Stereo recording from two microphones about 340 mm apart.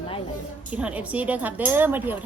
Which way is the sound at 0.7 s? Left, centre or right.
Centre.